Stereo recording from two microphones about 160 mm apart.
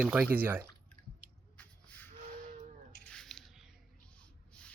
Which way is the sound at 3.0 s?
5° left (ahead or behind).